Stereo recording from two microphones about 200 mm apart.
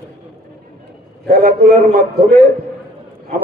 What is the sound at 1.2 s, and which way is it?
Speech, 45° right (ahead or behind).